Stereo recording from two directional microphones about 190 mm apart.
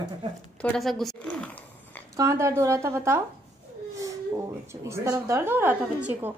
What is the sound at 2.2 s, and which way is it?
A woman's voice, 15° right (ahead or behind).